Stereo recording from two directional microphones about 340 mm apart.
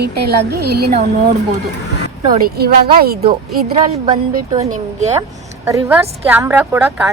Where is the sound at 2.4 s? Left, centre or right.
Right.